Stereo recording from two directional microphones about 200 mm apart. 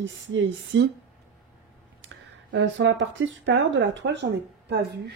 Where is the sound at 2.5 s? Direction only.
70° right (ahead or behind).